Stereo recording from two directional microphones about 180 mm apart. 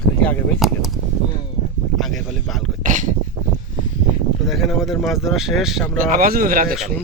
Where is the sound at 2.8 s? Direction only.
45° right (ahead or behind).